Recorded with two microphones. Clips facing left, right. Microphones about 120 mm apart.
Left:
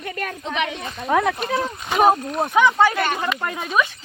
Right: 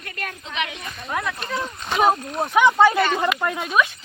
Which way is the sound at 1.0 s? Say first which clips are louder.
Left 8 dB; 90° left.